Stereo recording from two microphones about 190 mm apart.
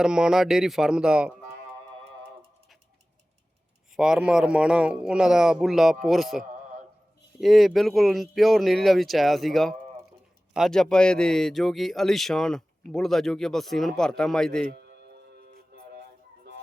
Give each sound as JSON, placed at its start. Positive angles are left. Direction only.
{"t": 0.0, "sound": "a man's voice", "side_deg": -5}
{"t": 3.9, "sound": "a man's voice", "side_deg": -5}
{"t": 14.7, "sound": "music", "side_deg": -55}